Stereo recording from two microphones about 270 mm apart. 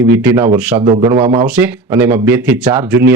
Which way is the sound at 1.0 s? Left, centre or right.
Centre.